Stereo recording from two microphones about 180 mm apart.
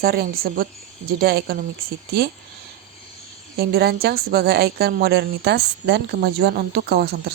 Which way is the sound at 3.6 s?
60° right (ahead or behind).